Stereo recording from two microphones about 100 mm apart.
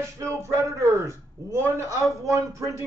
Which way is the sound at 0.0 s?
30° right (ahead or behind).